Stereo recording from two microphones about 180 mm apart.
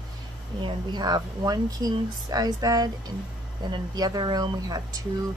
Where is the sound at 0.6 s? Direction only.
25° right (ahead or behind).